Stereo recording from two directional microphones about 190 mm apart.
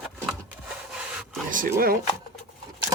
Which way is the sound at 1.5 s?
45° right (ahead or behind).